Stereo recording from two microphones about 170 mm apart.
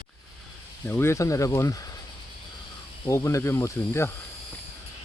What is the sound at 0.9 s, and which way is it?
Speech, 15° left (ahead or behind).